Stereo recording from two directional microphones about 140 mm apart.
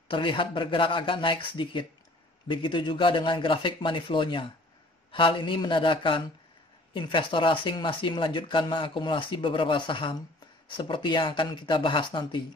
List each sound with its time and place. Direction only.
0.1 s speech: 35° left (ahead or behind)